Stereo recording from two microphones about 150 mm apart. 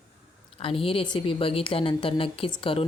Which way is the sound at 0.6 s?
40° left (ahead or behind).